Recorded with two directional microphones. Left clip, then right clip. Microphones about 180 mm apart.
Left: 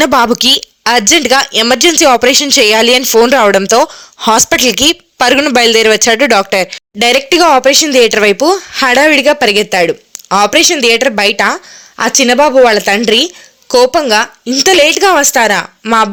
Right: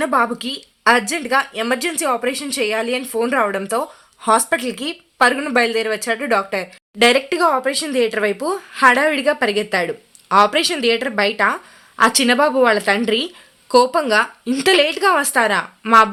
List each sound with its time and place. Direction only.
0.0 s a woman's voice: 50° left (ahead or behind)
15.8 s speech: 20° left (ahead or behind)